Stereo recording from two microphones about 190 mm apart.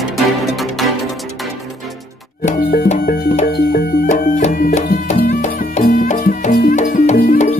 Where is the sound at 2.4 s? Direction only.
50° left (ahead or behind).